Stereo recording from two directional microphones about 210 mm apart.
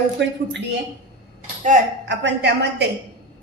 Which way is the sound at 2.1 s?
55° right (ahead or behind).